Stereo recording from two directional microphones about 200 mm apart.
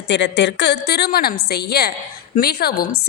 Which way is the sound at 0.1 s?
60° left (ahead or behind).